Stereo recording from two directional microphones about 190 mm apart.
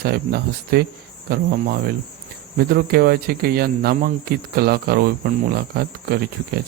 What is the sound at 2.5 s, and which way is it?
Speech, 50° right (ahead or behind).